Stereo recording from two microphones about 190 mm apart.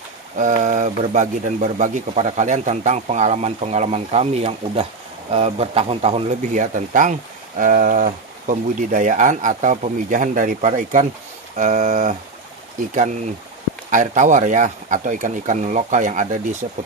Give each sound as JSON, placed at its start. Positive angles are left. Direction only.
{"t": 0.4, "sound": "speech", "side_deg": -40}
{"t": 13.8, "sound": "speech", "side_deg": -40}